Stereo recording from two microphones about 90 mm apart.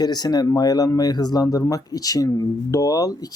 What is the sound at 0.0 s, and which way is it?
Speech, 45° left (ahead or behind).